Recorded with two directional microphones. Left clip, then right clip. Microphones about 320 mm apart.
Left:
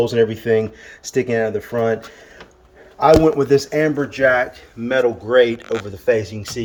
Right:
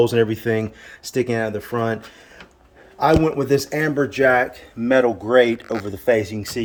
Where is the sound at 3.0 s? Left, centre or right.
Centre.